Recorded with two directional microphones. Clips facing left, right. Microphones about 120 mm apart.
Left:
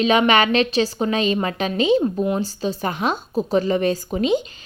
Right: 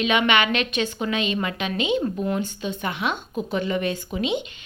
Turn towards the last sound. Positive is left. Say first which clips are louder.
# left 5 dB
turn(degrees=40)  # may be behind; listen again after turning